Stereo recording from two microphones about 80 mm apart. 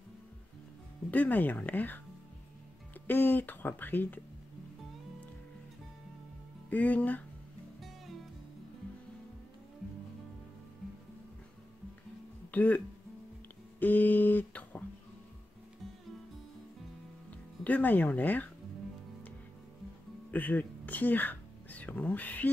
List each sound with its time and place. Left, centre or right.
1.1 s speech: left
3.1 s speech: left
6.7 s speech: centre
12.4 s speech: centre
17.3 s speech: centre
20.2 s a sound: left